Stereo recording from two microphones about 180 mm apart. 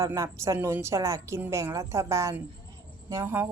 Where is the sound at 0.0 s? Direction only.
20° right (ahead or behind).